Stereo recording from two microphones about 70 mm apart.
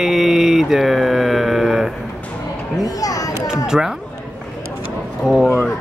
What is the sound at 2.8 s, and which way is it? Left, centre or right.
Speech, left.